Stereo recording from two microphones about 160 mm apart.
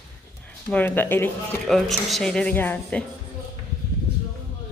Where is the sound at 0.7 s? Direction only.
10° left (ahead or behind).